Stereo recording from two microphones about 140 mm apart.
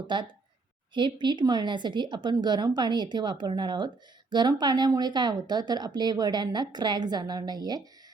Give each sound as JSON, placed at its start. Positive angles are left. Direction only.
{"t": 0.1, "sound": "speech", "side_deg": -35}